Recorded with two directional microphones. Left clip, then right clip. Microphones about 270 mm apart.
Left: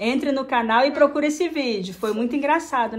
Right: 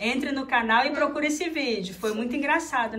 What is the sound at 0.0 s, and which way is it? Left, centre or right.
A woman's voice, centre.